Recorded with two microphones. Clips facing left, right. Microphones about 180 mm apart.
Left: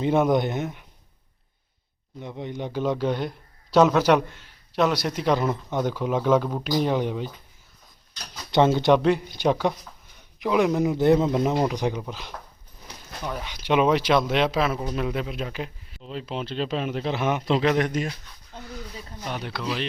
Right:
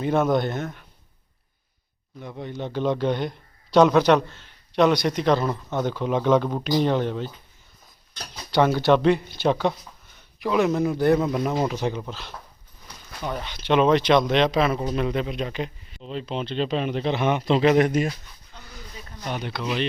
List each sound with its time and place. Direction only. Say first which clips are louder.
0.0 s speech: left 1 dB; 15° left (ahead or behind)
2.2 s speech: even; 20° left (ahead or behind)
8.4 s speech: even; 20° left (ahead or behind)
9.0 s speech: right 2 dB; 5° left (ahead or behind)
17.7 s speech: right 4 dB; 10° right (ahead or behind)
19.3 s speech: right 2 dB; centre (ahead or behind)